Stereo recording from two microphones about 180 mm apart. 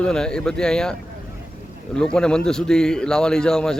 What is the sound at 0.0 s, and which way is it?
Speech, 5° left (ahead or behind).